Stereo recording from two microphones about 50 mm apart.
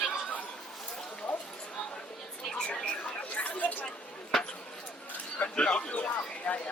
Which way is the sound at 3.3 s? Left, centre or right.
Left.